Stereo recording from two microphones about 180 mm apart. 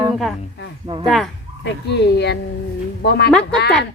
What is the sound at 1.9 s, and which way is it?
A woman's voice, 70° left (ahead or behind).